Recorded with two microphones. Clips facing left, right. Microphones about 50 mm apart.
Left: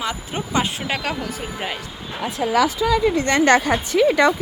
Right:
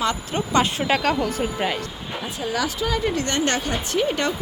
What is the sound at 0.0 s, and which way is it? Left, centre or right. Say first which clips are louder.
Speech: right 2 dB; centre.